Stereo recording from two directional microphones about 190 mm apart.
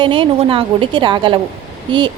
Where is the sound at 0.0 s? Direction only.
25° right (ahead or behind).